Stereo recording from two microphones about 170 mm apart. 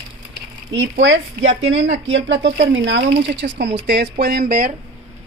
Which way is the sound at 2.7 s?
90° right.